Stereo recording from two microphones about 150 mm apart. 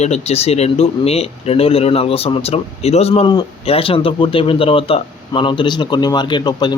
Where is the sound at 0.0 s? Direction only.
45° left (ahead or behind).